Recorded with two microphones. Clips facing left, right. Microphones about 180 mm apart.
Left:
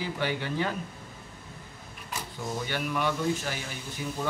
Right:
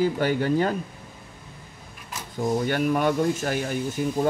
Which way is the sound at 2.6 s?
45° right (ahead or behind).